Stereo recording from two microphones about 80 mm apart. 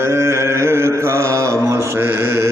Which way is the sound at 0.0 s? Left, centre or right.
Right.